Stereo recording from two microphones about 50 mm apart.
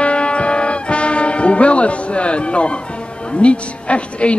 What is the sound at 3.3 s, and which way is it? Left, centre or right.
A woman's voice, left.